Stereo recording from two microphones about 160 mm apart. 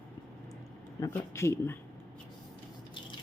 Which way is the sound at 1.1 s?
15° left (ahead or behind).